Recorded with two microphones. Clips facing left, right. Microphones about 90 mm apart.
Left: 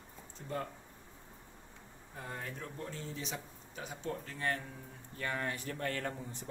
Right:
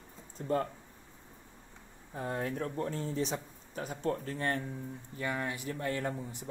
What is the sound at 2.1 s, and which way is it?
Speech, 45° right (ahead or behind).